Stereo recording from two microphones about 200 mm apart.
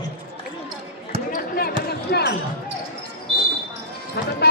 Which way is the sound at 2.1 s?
55° left (ahead or behind).